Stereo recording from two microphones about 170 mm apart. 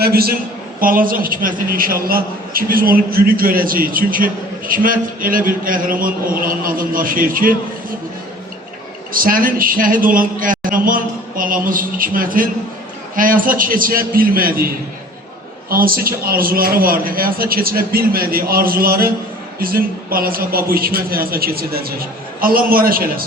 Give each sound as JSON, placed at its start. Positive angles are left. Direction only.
{"t": 0.0, "sound": "a man's voice", "side_deg": -65}
{"t": 9.1, "sound": "a man's voice", "side_deg": -55}
{"t": 15.7, "sound": "a man's voice", "side_deg": -60}